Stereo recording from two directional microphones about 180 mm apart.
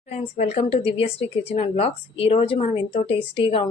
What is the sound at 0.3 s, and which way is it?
Speech, 35° left (ahead or behind).